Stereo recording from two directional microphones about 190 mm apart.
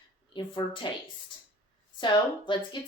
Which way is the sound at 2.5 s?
25° left (ahead or behind).